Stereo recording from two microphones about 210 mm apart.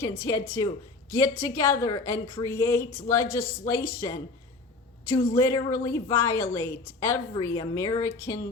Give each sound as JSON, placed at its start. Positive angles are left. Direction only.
{"t": 0.0, "sound": "a woman's voice", "side_deg": 15}
{"t": 3.2, "sound": "speech", "side_deg": 45}
{"t": 4.0, "sound": "a woman's voice", "side_deg": 15}